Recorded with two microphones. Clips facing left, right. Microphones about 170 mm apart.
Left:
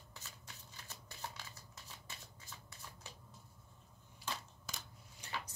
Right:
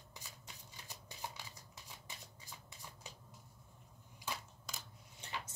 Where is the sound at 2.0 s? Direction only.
15° right (ahead or behind).